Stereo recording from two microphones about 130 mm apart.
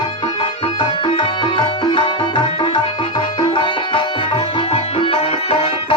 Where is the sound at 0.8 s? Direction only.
40° left (ahead or behind).